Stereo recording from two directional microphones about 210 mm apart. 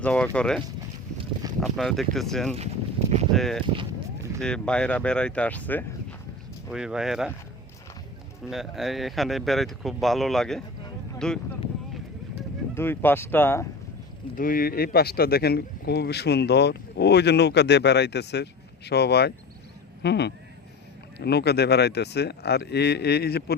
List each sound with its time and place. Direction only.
0.0 s speech: 5° left (ahead or behind)
1.2 s boat: 15° right (ahead or behind)
1.6 s speech: centre (ahead or behind)
6.7 s speech: 5° right (ahead or behind)
8.4 s speech: centre (ahead or behind)
12.7 s speech: 10° left (ahead or behind)
14.3 s speech: 40° left (ahead or behind)